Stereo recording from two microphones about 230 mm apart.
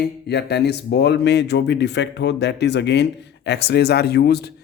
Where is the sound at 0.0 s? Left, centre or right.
Left.